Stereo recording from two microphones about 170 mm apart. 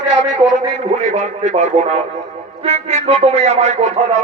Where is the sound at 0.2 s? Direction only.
90° right.